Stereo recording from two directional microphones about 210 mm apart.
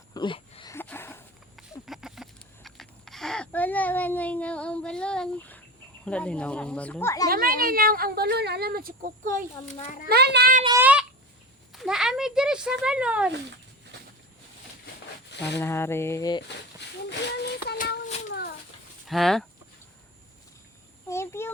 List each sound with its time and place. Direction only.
0.1 s speech: 25° left (ahead or behind)
0.7 s a sound: 10° left (ahead or behind)
1.9 s speech: centre (ahead or behind); by 7.3 s 15° left (ahead or behind)
7.3 s speech: 45° right (ahead or behind)
10.1 s speech: 50° right (ahead or behind)
10.6 s a child's voice: 20° right (ahead or behind)
11.7 s speech: centre (ahead or behind)
15.5 s a sound: 10° left (ahead or behind)
17.1 s child singing: 50° left (ahead or behind)
18.3 s a sound: 50° left (ahead or behind)
19.0 s speech: centre (ahead or behind)
21.1 s a sound: 10° left (ahead or behind)